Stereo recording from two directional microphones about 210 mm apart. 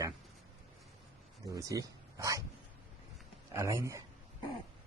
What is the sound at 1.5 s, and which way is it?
Speech, 15° right (ahead or behind).